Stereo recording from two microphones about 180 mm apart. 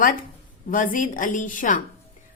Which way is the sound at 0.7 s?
45° left (ahead or behind).